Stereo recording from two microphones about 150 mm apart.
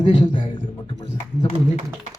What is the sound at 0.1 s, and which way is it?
Speech, 30° left (ahead or behind).